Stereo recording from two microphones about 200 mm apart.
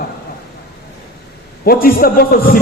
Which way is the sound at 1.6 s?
50° left (ahead or behind).